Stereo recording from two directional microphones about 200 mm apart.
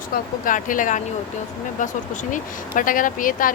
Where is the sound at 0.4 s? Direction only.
40° left (ahead or behind).